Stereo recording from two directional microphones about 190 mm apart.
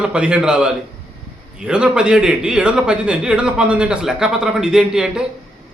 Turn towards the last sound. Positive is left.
turn(degrees=-5)  # may be behind; listen again after turning